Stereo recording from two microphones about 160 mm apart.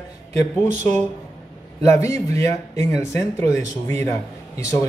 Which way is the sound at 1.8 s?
20° left (ahead or behind).